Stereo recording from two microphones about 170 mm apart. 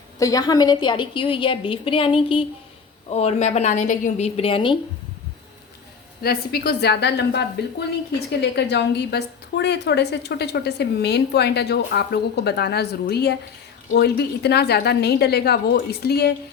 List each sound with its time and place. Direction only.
0.2 s a woman's voice: 20° left (ahead or behind)
6.2 s a woman's voice: 70° left (ahead or behind)